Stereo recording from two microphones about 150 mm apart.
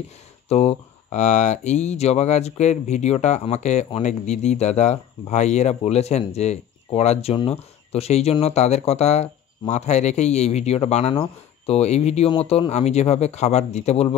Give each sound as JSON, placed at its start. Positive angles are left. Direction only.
{"t": 0.5, "sound": "speech", "side_deg": 45}